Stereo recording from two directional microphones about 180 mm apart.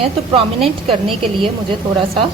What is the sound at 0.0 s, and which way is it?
A woman's voice, 30° right (ahead or behind).